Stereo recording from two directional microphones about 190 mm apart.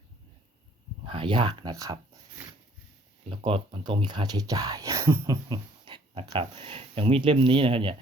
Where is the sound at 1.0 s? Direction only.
25° right (ahead or behind).